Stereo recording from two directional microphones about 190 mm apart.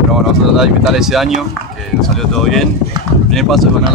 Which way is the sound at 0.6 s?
Centre (ahead or behind).